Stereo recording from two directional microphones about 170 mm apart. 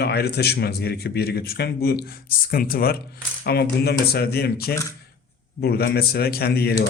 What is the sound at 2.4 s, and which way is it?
Speech, 60° left (ahead or behind).